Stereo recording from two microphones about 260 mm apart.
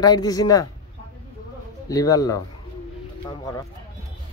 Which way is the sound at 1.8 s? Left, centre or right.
Centre.